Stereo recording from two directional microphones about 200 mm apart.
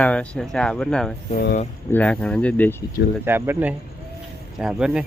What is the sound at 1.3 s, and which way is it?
Speech, 55° left (ahead or behind).